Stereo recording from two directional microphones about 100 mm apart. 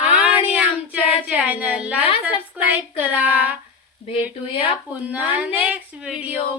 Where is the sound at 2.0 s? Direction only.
65° left (ahead or behind).